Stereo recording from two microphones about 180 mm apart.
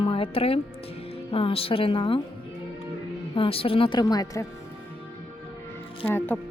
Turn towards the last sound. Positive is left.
turn(degrees=10)  # may be behind; listen again after turning